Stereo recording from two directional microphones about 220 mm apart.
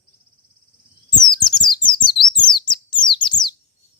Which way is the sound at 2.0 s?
20° left (ahead or behind).